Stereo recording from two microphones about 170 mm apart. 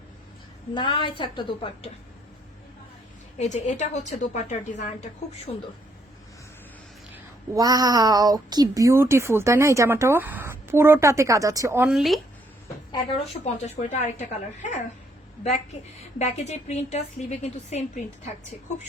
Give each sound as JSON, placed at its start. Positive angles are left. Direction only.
{"t": 0.7, "sound": "a woman's voice", "side_deg": 30}
{"t": 3.3, "sound": "a woman's voice", "side_deg": 45}
{"t": 7.1, "sound": "speech", "side_deg": -20}
{"t": 11.9, "sound": "speech", "side_deg": 0}
{"t": 12.9, "sound": "a woman's voice", "side_deg": 35}
{"t": 16.1, "sound": "a woman's voice", "side_deg": 40}